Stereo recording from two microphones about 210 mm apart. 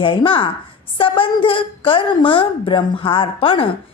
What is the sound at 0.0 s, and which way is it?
A woman's voice, 25° left (ahead or behind).